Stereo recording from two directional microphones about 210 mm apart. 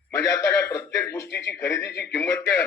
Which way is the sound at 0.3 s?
15° left (ahead or behind).